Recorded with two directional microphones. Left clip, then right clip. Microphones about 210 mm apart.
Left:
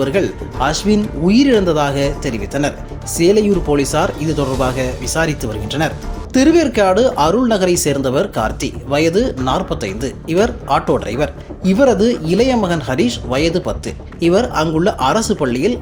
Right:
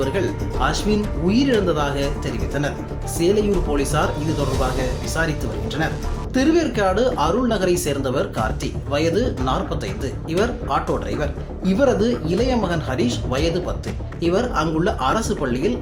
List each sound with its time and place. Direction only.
0.0 s speech: 35° left (ahead or behind)